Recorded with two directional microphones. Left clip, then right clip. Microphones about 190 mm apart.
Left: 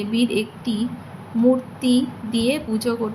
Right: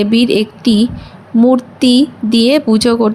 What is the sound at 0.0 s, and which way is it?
A woman's voice, 45° right (ahead or behind).